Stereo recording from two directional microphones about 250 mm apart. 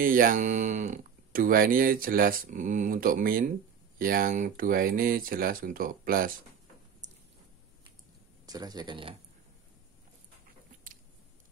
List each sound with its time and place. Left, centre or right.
0.0 s speech: right
7.0 s a sound: right
8.5 s speech: centre